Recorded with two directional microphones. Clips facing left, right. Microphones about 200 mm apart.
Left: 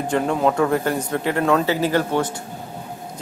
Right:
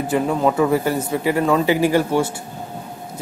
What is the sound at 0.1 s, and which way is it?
Speech, 5° right (ahead or behind).